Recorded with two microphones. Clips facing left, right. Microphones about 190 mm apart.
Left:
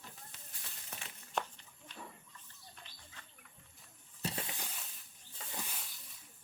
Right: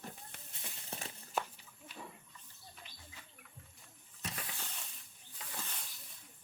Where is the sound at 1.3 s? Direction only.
5° right (ahead or behind).